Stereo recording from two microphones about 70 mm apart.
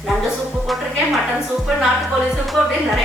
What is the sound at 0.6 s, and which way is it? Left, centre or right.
Speech, centre.